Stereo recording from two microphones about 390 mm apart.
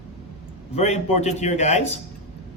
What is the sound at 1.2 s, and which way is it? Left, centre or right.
Speech, centre.